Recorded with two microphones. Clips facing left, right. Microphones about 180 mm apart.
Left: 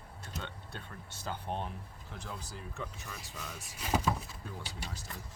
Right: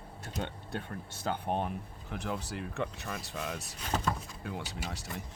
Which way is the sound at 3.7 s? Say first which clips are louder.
Left 3 dB; 5° left (ahead or behind).